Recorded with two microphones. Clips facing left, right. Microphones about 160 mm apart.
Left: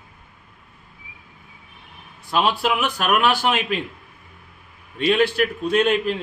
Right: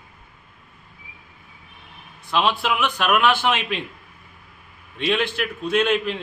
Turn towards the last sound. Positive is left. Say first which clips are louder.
# left 2 dB
turn(degrees=40)  # may be behind; listen again after turning